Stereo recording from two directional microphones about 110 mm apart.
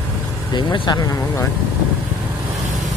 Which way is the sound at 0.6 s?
40° left (ahead or behind).